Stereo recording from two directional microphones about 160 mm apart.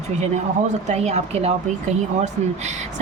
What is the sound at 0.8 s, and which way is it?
Speech, 45° right (ahead or behind).